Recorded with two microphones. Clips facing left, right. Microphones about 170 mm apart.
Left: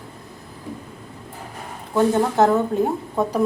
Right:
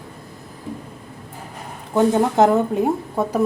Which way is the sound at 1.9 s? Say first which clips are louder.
Right 2 dB; 15° right (ahead or behind).